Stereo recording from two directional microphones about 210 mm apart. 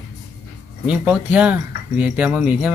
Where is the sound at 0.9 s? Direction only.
5° right (ahead or behind).